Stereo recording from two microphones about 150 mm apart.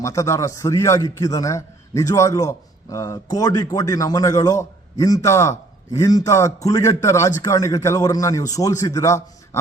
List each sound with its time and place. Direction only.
0.0 s a man's voice: 20° left (ahead or behind)